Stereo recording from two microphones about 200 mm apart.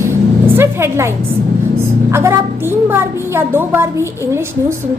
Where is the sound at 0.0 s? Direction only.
10° right (ahead or behind).